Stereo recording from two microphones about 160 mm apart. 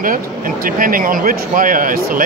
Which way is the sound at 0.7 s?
60° right (ahead or behind).